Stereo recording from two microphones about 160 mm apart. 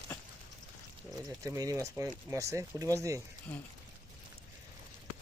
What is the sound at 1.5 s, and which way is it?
Speech, 20° right (ahead or behind).